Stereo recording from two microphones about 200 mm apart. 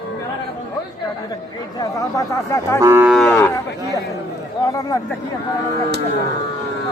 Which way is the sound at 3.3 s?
10° left (ahead or behind).